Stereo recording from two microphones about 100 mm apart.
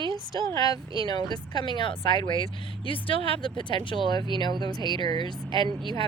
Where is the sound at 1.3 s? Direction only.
50° left (ahead or behind).